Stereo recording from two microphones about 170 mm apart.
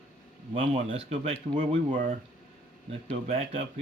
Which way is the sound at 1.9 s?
50° right (ahead or behind).